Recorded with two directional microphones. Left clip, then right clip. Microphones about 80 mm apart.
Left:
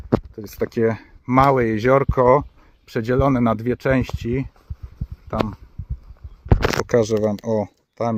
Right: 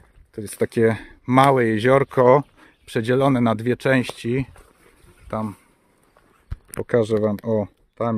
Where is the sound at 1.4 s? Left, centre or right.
Right.